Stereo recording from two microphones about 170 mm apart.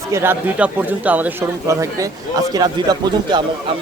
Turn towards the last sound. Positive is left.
turn(degrees=-25)  # may be behind; listen again after turning